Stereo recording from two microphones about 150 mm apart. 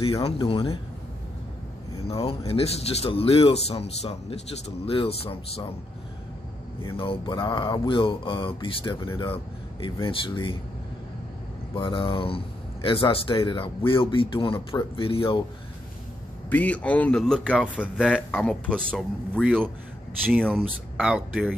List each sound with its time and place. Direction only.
0.0 s speech: 35° left (ahead or behind)
2.0 s speech: 40° left (ahead or behind)
7.0 s speech: 35° left (ahead or behind)
11.7 s speech: 35° left (ahead or behind)
16.4 s a man's voice: 10° left (ahead or behind)